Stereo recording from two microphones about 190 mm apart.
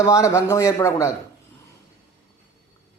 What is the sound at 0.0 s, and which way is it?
A man's voice, 20° left (ahead or behind).